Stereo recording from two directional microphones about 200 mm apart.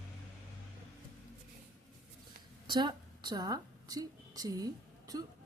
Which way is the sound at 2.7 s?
20° right (ahead or behind).